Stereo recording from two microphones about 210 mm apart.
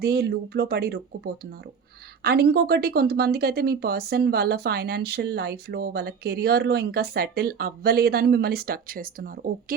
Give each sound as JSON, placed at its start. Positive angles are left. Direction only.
{"t": 0.0, "sound": "speech", "side_deg": -50}